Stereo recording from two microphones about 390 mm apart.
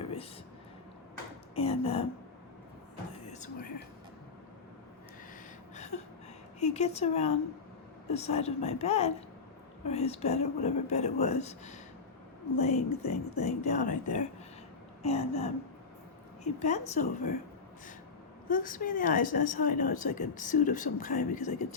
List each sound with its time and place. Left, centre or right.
0.0 s a sound: centre
1.5 s a woman's voice: centre
3.3 s whispering: centre
5.7 s a sound: centre
6.6 s a woman's voice: centre
15.0 s a woman's voice: centre
18.4 s a woman's voice: left